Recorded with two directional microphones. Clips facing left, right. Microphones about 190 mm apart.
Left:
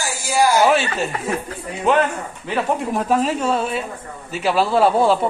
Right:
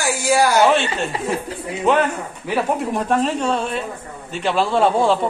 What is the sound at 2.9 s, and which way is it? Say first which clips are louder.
A man's voice: even; 5° left (ahead or behind).